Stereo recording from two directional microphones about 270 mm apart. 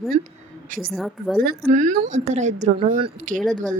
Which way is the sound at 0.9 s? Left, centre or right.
Centre.